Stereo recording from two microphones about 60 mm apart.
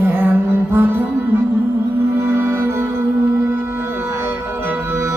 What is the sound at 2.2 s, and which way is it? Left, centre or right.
Music, right.